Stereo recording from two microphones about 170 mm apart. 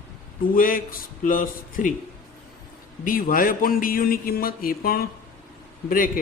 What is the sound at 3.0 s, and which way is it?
A man's voice, 55° left (ahead or behind).